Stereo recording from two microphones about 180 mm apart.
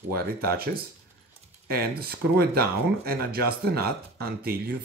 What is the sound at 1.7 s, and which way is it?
Speech, 60° right (ahead or behind).